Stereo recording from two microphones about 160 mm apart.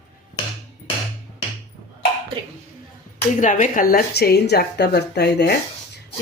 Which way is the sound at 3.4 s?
55° left (ahead or behind).